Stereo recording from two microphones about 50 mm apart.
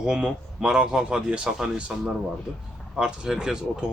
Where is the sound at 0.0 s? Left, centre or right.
Centre.